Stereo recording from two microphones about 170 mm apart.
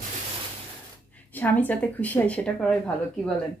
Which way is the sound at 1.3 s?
10° left (ahead or behind).